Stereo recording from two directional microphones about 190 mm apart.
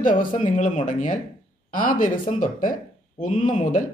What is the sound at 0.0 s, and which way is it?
Speech, 45° left (ahead or behind).